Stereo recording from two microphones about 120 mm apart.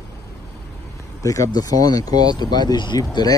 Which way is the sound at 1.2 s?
30° left (ahead or behind).